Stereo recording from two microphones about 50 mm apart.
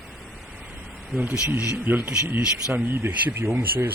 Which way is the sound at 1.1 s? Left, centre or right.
Right.